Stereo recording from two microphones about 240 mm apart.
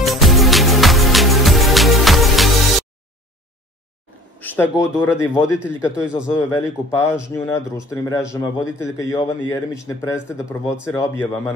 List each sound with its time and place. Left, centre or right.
0.0 s music: centre
4.4 s speech: centre
5.6 s a man's voice: centre
6.2 s speech: centre
10.2 s a man's voice: centre
10.9 s speech: centre